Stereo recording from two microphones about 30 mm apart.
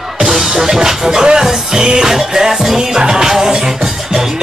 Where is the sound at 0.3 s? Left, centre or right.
Centre.